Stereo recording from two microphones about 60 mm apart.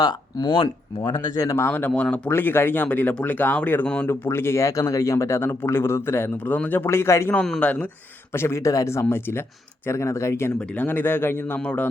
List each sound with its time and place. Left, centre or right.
1.0 s speech: left
2.0 s speech: left
2.3 s a man's voice: left; by 4.1 s centre
4.1 s speech: left
4.6 s speech: left
6.3 s a man's voice: left
7.6 s speech: left
8.3 s speech: left
8.6 s speech: left
10.8 s a man's voice: left